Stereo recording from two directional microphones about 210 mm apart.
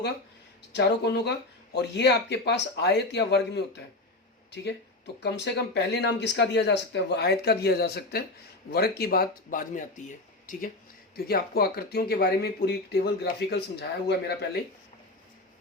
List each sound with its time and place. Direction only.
0.7 s speech: 55° left (ahead or behind)
5.2 s speech: 55° left (ahead or behind)